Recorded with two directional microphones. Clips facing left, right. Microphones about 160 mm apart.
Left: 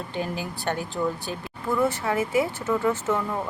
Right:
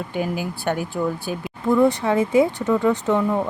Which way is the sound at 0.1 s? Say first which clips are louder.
Right 5 dB; 15° right (ahead or behind).